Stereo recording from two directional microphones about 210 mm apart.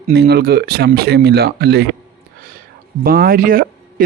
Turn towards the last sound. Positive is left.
turn(degrees=-40)  # may be behind; listen again after turning